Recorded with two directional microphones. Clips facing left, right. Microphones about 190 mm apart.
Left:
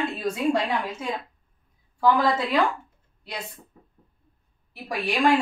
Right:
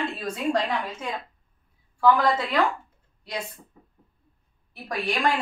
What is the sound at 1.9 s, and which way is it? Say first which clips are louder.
Speech: even; 10° left (ahead or behind).